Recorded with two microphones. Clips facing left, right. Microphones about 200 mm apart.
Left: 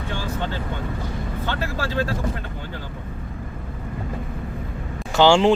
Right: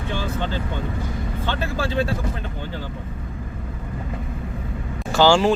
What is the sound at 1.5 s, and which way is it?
Speech, 20° right (ahead or behind).